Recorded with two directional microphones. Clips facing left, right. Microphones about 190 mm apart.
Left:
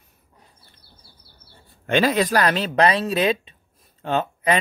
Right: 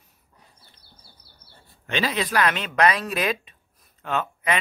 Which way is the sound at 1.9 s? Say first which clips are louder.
Left 7 dB; 50° left (ahead or behind).